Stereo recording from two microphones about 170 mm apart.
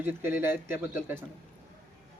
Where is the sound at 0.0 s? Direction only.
15° right (ahead or behind).